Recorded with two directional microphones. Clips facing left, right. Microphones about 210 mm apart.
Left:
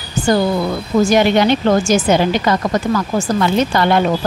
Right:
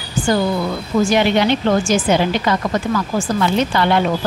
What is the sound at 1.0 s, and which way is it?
A woman's voice, 45° left (ahead or behind).